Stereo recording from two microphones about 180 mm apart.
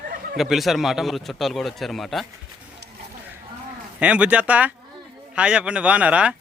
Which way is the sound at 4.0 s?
5° right (ahead or behind).